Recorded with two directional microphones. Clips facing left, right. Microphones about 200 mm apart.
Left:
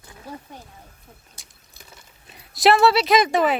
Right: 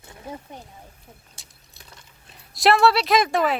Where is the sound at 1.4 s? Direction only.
Centre (ahead or behind).